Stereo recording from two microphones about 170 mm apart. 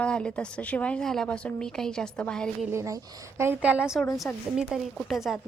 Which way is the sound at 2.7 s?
15° right (ahead or behind).